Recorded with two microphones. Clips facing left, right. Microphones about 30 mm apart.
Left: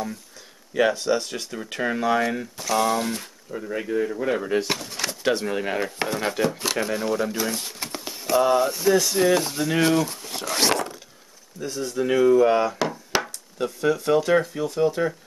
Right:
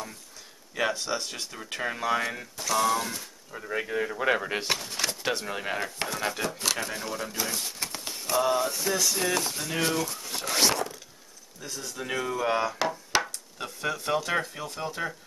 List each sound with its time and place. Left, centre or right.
0.7 s speech: centre
3.6 s speech: centre
4.6 s speech: centre
11.6 s speech: left
12.0 s speech: centre
13.6 s speech: centre